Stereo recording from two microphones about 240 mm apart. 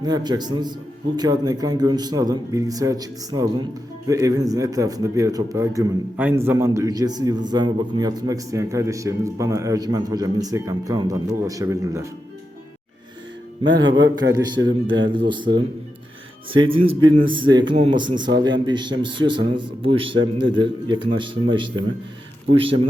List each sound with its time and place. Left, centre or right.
0.0 s a man's voice: centre
13.7 s a man's voice: centre